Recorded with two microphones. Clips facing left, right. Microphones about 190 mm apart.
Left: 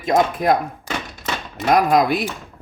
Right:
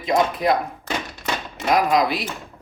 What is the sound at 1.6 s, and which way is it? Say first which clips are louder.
Speech: left 3 dB; 50° left (ahead or behind).